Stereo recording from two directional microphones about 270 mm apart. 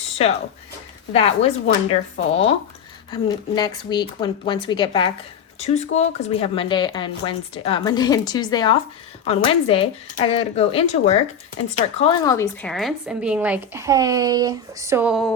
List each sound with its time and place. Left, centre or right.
0.2 s speech: left
3.1 s a woman's voice: centre